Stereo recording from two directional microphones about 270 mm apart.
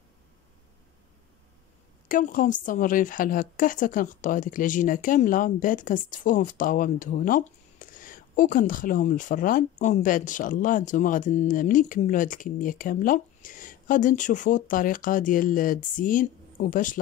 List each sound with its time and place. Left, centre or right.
2.0 s a woman's voice: left